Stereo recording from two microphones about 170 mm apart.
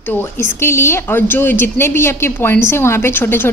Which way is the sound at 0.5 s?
15° left (ahead or behind).